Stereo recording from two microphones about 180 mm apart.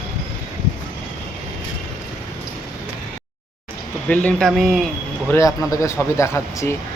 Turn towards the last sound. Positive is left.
turn(degrees=15)  # may be behind; listen again after turning